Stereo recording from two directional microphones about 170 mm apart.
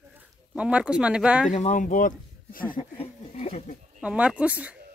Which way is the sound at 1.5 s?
45° left (ahead or behind).